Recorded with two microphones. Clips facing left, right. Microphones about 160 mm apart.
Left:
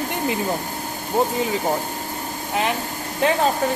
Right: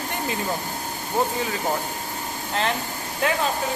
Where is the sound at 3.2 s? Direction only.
25° left (ahead or behind).